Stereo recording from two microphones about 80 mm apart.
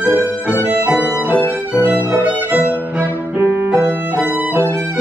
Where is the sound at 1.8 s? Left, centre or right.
Right.